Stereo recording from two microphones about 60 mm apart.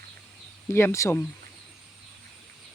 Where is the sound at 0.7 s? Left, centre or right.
Left.